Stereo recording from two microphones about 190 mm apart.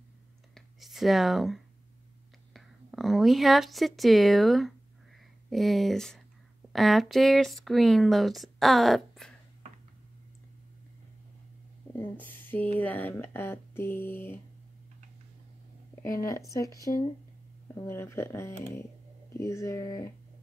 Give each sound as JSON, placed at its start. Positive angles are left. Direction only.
{"t": 0.6, "sound": "a sound", "side_deg": 0}
{"t": 2.5, "sound": "speech", "side_deg": 0}
{"t": 11.9, "sound": "speech", "side_deg": 10}
{"t": 16.0, "sound": "speech", "side_deg": 15}